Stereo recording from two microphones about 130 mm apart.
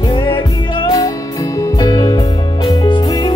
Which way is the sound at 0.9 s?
25° left (ahead or behind).